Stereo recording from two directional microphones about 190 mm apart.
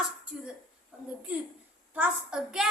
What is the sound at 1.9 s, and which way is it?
Speech, 5° right (ahead or behind).